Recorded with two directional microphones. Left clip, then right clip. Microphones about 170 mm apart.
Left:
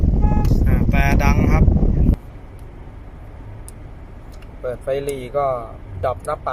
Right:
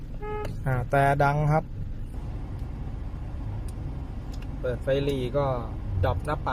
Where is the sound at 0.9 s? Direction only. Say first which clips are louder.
Even; 25° right (ahead or behind).